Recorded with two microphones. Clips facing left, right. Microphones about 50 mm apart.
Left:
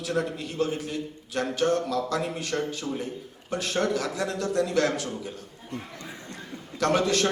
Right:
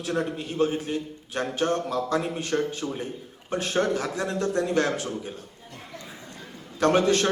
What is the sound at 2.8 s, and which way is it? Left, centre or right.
Speech, centre.